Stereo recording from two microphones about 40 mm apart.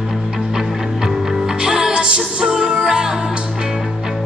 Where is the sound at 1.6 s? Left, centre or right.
Centre.